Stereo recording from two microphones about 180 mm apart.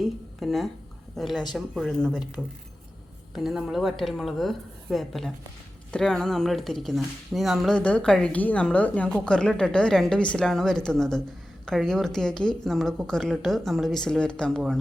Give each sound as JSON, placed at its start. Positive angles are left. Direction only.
{"t": 0.0, "sound": "speech", "side_deg": 0}